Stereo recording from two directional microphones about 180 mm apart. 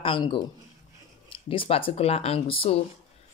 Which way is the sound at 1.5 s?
30° left (ahead or behind).